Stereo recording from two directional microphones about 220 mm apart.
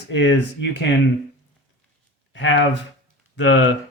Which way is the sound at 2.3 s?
55° left (ahead or behind).